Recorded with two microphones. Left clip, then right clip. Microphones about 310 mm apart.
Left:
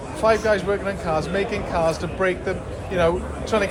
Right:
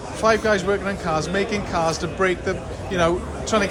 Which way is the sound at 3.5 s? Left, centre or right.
Right.